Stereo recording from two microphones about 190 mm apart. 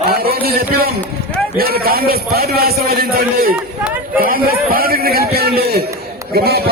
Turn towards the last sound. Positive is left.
turn(degrees=-55)  # may be behind; listen again after turning